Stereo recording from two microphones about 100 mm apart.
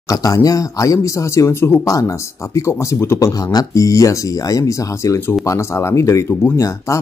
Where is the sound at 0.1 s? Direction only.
35° left (ahead or behind).